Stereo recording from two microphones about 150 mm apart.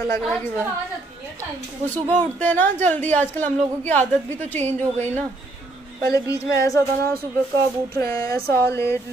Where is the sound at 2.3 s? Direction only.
10° left (ahead or behind).